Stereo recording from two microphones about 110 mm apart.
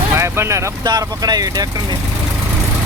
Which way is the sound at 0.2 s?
25° right (ahead or behind).